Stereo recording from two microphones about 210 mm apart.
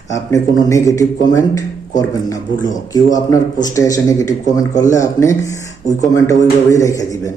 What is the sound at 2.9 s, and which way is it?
Speech, 15° left (ahead or behind).